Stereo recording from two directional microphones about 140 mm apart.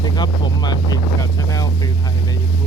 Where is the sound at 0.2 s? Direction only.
30° left (ahead or behind).